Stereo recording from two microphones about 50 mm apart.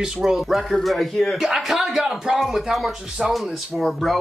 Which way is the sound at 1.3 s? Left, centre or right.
Centre.